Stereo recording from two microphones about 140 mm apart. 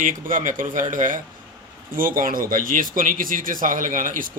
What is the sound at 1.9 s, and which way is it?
Speech, 85° right.